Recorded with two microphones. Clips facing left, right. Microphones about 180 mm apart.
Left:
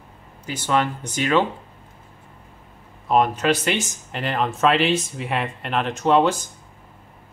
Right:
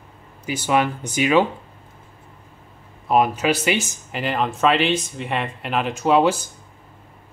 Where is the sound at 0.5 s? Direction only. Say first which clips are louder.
Right 2 dB; 10° right (ahead or behind).